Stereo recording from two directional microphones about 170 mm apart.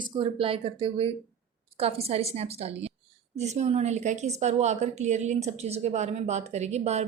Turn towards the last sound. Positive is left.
turn(degrees=-40)  # may be behind; listen again after turning